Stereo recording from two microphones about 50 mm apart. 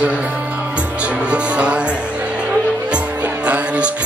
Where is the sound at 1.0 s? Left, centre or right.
Right.